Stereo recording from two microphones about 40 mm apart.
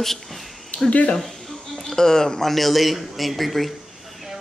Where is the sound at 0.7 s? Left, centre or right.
Left.